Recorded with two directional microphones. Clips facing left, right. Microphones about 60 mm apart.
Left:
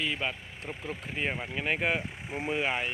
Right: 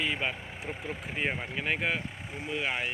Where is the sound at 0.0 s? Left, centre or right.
Centre.